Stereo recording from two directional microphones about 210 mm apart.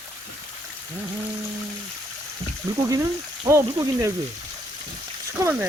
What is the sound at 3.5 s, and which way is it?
Speech, 15° right (ahead or behind).